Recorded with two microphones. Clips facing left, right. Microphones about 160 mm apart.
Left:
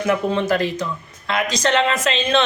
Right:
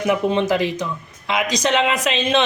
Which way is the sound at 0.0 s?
15° right (ahead or behind).